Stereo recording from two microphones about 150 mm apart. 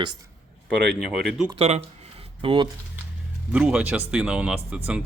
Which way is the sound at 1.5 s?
40° right (ahead or behind).